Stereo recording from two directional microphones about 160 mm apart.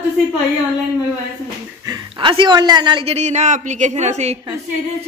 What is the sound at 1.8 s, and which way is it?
Speech, 30° right (ahead or behind).